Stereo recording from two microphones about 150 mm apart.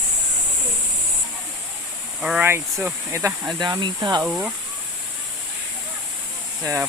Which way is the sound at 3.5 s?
30° right (ahead or behind).